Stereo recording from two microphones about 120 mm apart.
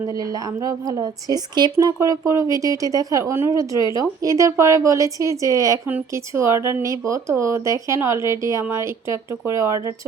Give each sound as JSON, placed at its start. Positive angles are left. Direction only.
{"t": 0.2, "sound": "speech", "side_deg": -30}